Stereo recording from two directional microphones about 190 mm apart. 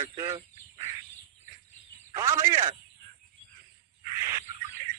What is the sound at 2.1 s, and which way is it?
Speech, 15° right (ahead or behind).